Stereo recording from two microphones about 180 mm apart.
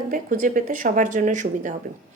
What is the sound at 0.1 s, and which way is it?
A woman's voice, 50° right (ahead or behind).